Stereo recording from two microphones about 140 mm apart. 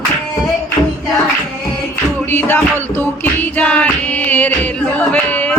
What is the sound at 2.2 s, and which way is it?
Music, 15° left (ahead or behind).